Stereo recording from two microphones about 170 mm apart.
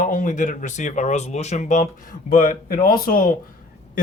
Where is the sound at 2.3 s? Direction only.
55° left (ahead or behind).